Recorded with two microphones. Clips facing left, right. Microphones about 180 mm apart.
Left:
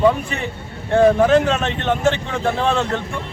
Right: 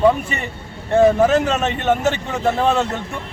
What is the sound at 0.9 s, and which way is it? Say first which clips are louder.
Speech: even; 5° right (ahead or behind).